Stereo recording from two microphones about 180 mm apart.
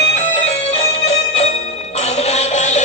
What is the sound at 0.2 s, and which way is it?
Music, 35° left (ahead or behind).